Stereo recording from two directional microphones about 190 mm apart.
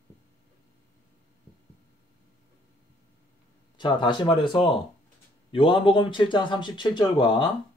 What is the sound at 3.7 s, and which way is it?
Speech, 25° left (ahead or behind).